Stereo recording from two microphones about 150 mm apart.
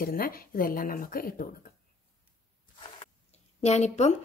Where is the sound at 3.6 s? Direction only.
50° left (ahead or behind).